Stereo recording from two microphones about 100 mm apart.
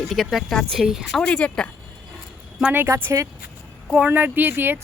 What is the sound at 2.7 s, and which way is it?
Speech, 20° right (ahead or behind).